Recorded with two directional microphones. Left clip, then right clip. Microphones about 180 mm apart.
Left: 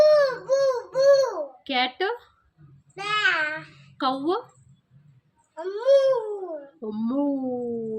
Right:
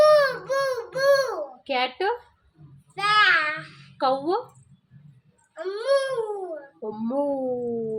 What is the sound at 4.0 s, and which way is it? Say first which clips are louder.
Speech: right 2 dB; 20° left (ahead or behind).